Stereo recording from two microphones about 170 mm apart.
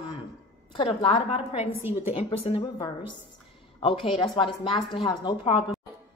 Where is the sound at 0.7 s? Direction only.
40° left (ahead or behind).